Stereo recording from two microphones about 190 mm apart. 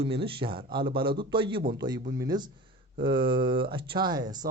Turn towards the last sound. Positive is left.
turn(degrees=-20)  # may be behind; listen again after turning